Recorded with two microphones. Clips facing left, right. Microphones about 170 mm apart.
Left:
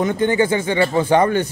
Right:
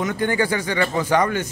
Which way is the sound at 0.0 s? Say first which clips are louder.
Left 4 dB; 25° left (ahead or behind).